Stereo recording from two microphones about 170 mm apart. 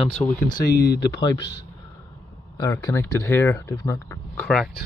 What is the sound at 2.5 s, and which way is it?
Speech, 20° left (ahead or behind).